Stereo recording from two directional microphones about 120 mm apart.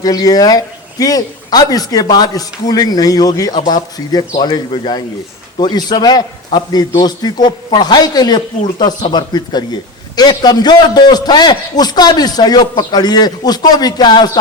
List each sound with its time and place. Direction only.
0.0 s a man's voice: 30° left (ahead or behind)